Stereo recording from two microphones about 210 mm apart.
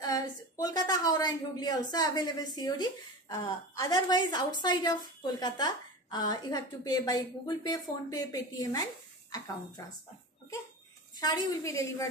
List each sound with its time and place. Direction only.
0.0 s a woman's voice: 15° left (ahead or behind)
11.1 s a woman's voice: 20° left (ahead or behind)